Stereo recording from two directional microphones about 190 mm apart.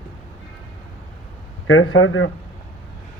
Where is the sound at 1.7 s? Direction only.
90° left.